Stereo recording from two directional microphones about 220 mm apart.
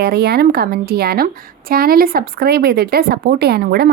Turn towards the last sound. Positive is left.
turn(degrees=-45)  # may be behind; listen again after turning